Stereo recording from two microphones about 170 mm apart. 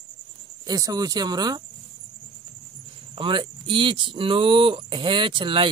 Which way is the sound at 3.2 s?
30° right (ahead or behind).